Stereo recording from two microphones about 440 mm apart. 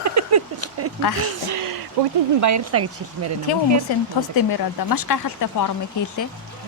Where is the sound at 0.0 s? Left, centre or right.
Right.